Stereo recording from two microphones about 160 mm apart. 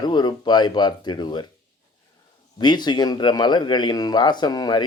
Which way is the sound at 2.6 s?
25° left (ahead or behind).